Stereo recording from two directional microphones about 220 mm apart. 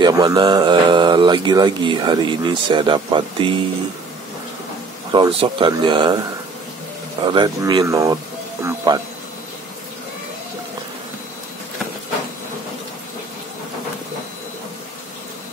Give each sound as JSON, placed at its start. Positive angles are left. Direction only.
{"t": 0.0, "sound": "speech", "side_deg": -20}
{"t": 5.1, "sound": "speech", "side_deg": -20}
{"t": 7.2, "sound": "speech", "side_deg": -20}
{"t": 8.6, "sound": "a sound", "side_deg": -15}